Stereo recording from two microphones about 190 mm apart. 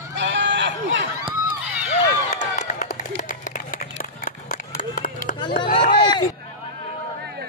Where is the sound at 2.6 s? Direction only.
40° left (ahead or behind).